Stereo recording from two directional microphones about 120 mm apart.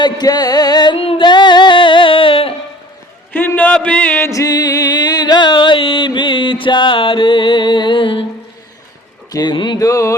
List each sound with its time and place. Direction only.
0.0 s music: 35° left (ahead or behind)
0.9 s singing: 55° left (ahead or behind)
1.3 s music: 40° left (ahead or behind)
3.3 s speech: 15° left (ahead or behind)
4.3 s music: 30° left (ahead or behind)
9.3 s music: 35° left (ahead or behind)